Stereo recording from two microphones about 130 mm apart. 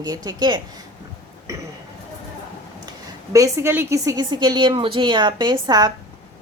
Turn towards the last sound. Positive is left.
turn(degrees=-30)  # may be behind; listen again after turning